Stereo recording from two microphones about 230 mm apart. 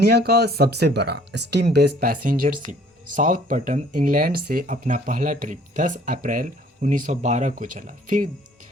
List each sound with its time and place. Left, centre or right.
0.0 s speech: right